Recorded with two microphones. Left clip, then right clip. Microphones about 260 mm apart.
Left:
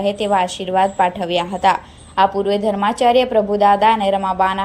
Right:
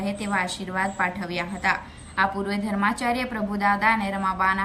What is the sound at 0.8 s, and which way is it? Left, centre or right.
Speech, left.